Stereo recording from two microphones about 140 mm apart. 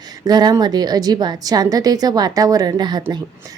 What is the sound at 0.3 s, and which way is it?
A woman's voice, 30° right (ahead or behind).